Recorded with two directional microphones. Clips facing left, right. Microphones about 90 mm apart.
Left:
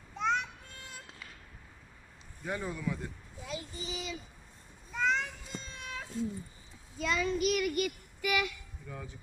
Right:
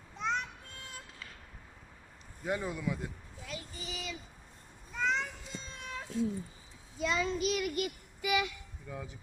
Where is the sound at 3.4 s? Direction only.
25° left (ahead or behind).